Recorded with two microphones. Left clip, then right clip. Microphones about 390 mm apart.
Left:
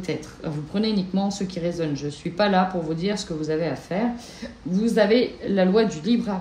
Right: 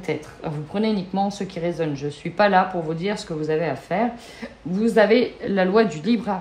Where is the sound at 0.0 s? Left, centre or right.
Centre.